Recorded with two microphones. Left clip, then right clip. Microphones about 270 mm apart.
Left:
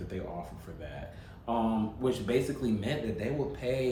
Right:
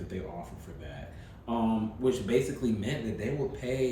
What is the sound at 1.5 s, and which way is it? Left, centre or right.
Speech, centre.